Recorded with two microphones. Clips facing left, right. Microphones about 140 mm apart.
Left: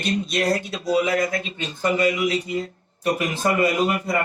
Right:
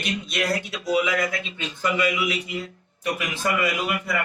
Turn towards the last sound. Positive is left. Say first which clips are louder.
# left 5 dB
turn(degrees=35)  # may be behind; listen again after turning